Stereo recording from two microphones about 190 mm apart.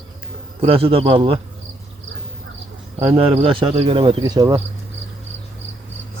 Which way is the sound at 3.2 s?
30° right (ahead or behind).